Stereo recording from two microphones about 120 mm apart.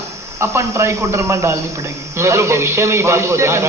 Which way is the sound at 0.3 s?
20° right (ahead or behind).